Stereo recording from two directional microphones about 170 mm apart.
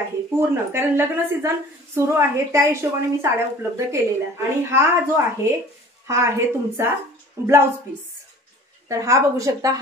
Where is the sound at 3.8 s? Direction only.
15° right (ahead or behind).